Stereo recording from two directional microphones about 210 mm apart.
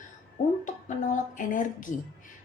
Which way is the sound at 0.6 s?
40° left (ahead or behind).